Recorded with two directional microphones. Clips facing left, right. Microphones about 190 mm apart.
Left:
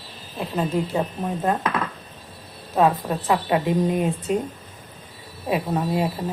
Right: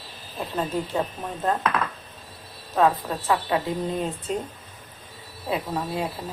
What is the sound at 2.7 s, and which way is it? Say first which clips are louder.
Speech: left 2 dB; 15° left (ahead or behind).